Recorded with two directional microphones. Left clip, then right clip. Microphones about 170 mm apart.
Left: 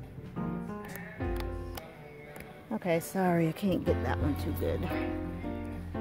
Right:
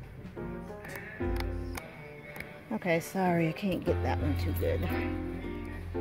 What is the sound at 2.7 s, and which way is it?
A woman's voice, 10° left (ahead or behind).